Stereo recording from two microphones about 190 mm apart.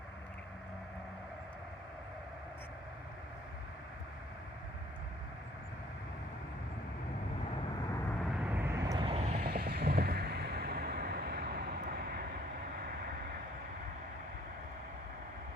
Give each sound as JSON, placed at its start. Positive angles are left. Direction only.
{"t": 8.2, "sound": "vehicle", "side_deg": -5}
{"t": 9.5, "sound": "vehicle", "side_deg": -55}